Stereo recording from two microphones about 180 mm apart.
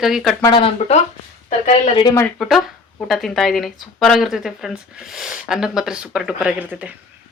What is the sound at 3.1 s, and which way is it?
Speech, centre (ahead or behind).